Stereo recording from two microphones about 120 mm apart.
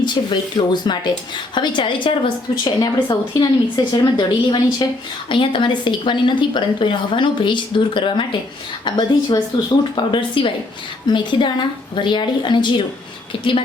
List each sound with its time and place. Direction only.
0.0 s a woman's voice: 40° left (ahead or behind)